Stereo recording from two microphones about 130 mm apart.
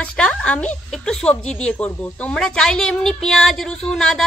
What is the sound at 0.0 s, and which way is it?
A woman's voice, 10° left (ahead or behind).